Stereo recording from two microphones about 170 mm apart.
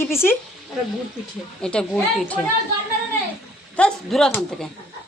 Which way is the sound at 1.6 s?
5° left (ahead or behind).